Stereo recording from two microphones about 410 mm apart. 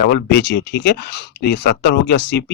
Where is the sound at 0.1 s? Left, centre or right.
Left.